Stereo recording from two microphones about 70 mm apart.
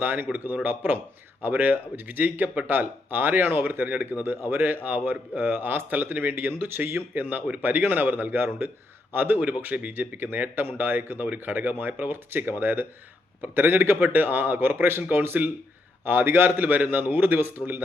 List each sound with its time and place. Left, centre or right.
0.0 s speech: right